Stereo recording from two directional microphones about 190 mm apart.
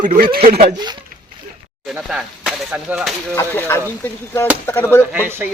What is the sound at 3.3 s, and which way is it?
Chop, 10° left (ahead or behind).